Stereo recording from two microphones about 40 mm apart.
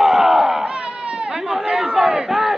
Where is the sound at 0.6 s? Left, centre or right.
Right.